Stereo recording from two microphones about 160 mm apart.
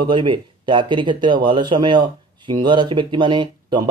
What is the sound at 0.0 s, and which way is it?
Speech, 30° right (ahead or behind).